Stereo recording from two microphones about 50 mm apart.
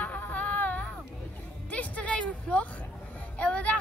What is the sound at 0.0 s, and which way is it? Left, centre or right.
Music, left.